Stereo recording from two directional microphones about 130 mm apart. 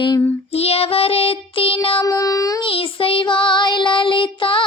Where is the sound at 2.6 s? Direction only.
45° left (ahead or behind).